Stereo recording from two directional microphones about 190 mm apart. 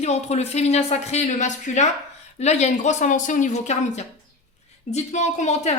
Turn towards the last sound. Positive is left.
turn(degrees=35)  # may be behind; listen again after turning